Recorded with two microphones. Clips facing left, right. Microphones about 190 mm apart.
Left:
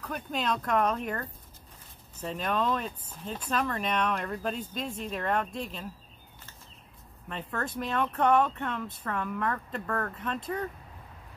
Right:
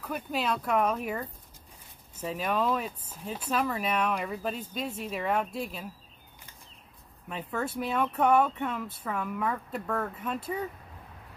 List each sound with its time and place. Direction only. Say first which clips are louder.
0.0 s speech: right 1 dB; 5° right (ahead or behind)
7.2 s speech: right 2 dB; 10° right (ahead or behind)